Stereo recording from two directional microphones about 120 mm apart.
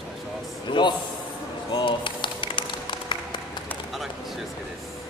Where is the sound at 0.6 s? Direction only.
40° left (ahead or behind).